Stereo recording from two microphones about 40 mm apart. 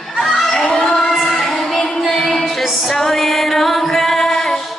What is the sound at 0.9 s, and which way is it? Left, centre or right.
Singing, centre.